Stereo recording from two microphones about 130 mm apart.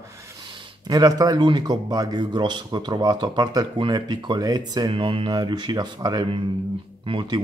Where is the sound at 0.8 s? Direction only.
30° right (ahead or behind).